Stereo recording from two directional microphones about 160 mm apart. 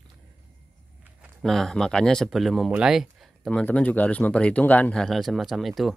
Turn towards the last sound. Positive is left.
turn(degrees=0)  # may be behind; listen again after turning